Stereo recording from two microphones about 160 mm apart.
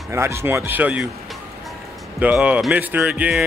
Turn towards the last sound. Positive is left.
turn(degrees=-10)  # may be behind; listen again after turning